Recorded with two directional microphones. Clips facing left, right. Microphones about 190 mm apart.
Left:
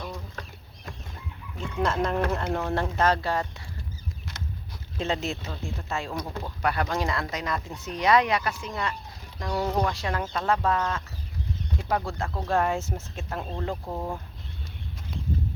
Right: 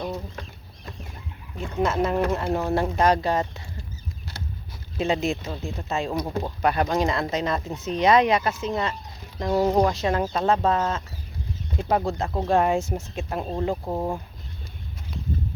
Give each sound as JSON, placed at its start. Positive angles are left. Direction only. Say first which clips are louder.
{"t": 1.8, "sound": "speech", "louder": "right 3 dB", "side_deg": -5}
{"t": 4.9, "sound": "speech", "louder": "right 5 dB", "side_deg": -10}